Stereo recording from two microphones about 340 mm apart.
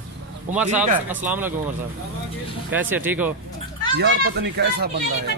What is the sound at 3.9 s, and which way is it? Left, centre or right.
Speech, right.